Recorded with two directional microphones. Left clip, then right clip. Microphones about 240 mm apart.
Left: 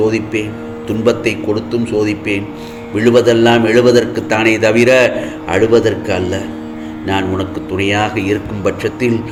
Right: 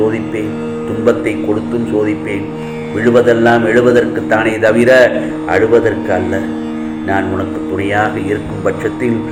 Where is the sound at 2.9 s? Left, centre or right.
Left.